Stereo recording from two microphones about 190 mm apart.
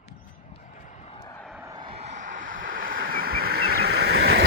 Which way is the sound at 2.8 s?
50° right (ahead or behind).